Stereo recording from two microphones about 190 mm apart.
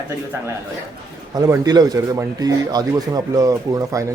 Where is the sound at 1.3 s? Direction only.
20° right (ahead or behind).